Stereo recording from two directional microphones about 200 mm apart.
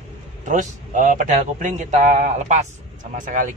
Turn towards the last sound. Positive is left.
turn(degrees=-40)  # may be behind; listen again after turning